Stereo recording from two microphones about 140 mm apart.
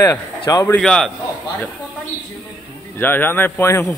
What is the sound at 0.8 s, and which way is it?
Speech, 5° left (ahead or behind).